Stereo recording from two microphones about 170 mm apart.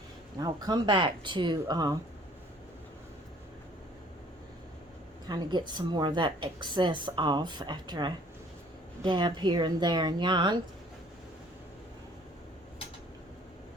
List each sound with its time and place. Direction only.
0.3 s speech: 25° right (ahead or behind)
5.3 s speech: 25° right (ahead or behind)